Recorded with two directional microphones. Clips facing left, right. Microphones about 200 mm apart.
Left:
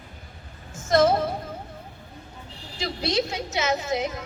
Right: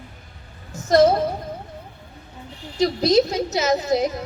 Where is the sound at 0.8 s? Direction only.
35° right (ahead or behind).